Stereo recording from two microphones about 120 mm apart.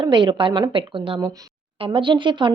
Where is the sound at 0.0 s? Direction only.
40° right (ahead or behind).